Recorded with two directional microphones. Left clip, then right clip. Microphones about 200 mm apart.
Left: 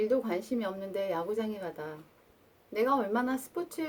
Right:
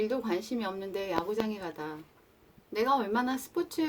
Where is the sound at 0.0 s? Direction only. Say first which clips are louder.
Left 2 dB; 30° right (ahead or behind).